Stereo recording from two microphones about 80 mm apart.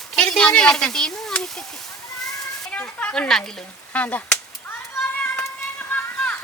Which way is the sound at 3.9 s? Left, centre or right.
Centre.